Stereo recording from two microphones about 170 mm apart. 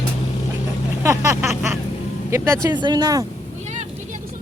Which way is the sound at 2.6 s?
25° right (ahead or behind).